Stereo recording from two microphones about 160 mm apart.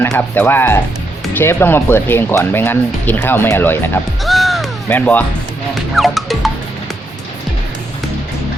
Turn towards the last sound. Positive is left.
turn(degrees=0)  # may be behind; listen again after turning